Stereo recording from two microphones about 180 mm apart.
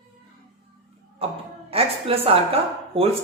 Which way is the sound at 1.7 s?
30° right (ahead or behind).